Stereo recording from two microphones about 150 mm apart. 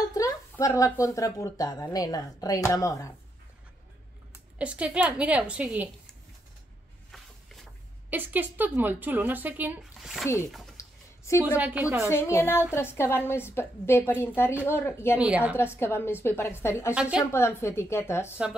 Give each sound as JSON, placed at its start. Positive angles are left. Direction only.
{"t": 0.1, "sound": "speech", "side_deg": 20}
{"t": 4.3, "sound": "a woman's voice", "side_deg": -10}
{"t": 8.1, "sound": "a woman's voice", "side_deg": -10}
{"t": 9.9, "sound": "a sound", "side_deg": 0}
{"t": 10.2, "sound": "a woman's voice", "side_deg": 15}
{"t": 10.8, "sound": "a sound", "side_deg": 20}
{"t": 11.4, "sound": "a woman's voice", "side_deg": -10}
{"t": 12.1, "sound": "a woman's voice", "side_deg": 15}
{"t": 15.1, "sound": "a woman's voice", "side_deg": -10}
{"t": 15.5, "sound": "a woman's voice", "side_deg": 15}
{"t": 16.9, "sound": "a woman's voice", "side_deg": -5}
{"t": 17.3, "sound": "a woman's voice", "side_deg": 15}